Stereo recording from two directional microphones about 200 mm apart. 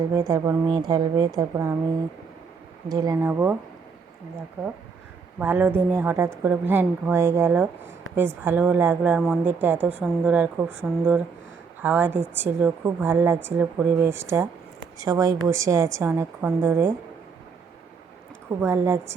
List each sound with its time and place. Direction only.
0.1 s a woman's voice: 15° right (ahead or behind)
2.9 s a woman's voice: 20° right (ahead or behind)
5.4 s a woman's voice: 10° right (ahead or behind)
18.6 s a woman's voice: 10° right (ahead or behind)